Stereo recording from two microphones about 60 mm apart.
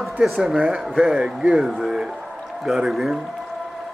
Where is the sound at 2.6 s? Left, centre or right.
Centre.